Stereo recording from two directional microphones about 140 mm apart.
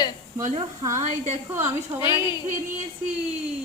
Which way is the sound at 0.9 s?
55° right (ahead or behind).